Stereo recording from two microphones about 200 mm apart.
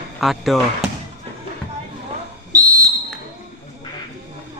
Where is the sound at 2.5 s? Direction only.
20° right (ahead or behind).